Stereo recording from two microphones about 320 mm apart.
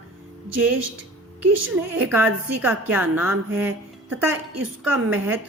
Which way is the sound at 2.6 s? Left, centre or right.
Centre.